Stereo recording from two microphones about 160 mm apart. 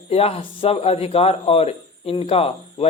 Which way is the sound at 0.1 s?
40° left (ahead or behind).